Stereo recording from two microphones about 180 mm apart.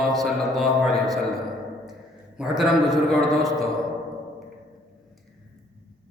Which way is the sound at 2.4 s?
5° right (ahead or behind).